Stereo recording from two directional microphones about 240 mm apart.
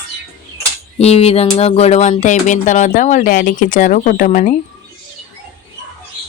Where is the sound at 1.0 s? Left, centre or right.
Left.